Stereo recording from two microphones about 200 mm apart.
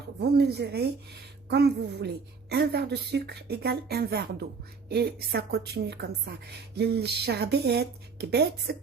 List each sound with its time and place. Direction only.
0.2 s a woman's voice: 55° right (ahead or behind)